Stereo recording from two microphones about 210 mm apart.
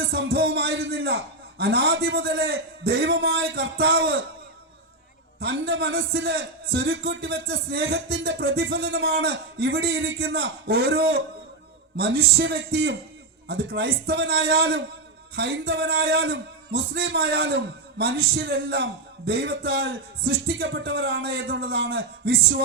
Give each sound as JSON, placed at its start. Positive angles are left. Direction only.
{"t": 0.0, "sound": "a man's voice", "side_deg": -50}
{"t": 5.4, "sound": "a man's voice", "side_deg": -50}